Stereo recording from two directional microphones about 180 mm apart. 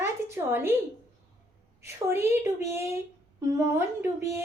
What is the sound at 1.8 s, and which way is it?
A woman's voice, 15° right (ahead or behind).